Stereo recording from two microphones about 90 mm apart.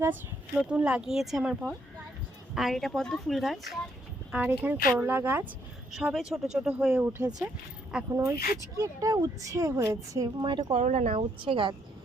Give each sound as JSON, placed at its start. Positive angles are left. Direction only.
{"t": 0.0, "sound": "speech", "side_deg": -20}
{"t": 0.6, "sound": "speech", "side_deg": -10}
{"t": 4.3, "sound": "speech", "side_deg": -20}
{"t": 5.9, "sound": "speech", "side_deg": -10}
{"t": 7.2, "sound": "speech", "side_deg": -45}
{"t": 10.4, "sound": "speech", "side_deg": -60}
{"t": 11.3, "sound": "speech", "side_deg": -80}